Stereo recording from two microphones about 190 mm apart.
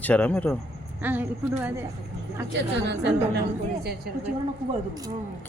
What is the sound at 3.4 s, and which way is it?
Speech, 55° right (ahead or behind).